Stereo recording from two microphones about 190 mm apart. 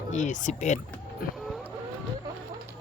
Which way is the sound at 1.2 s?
50° left (ahead or behind).